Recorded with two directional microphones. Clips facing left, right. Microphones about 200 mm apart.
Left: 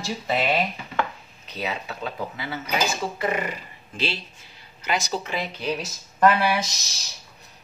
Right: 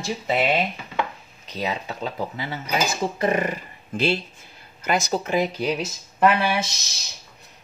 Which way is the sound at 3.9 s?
50° right (ahead or behind).